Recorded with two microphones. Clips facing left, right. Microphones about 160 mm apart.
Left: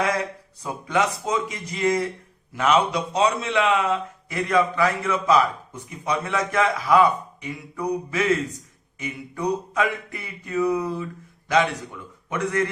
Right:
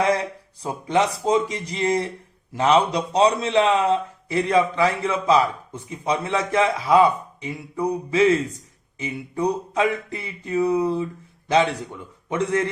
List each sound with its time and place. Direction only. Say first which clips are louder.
0.6 s a man's voice: right 2 dB; 30° right (ahead or behind)